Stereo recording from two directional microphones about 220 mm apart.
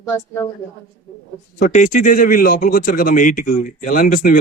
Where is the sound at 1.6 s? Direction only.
35° left (ahead or behind).